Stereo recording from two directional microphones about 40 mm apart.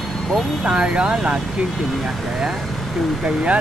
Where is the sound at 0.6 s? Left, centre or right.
Right.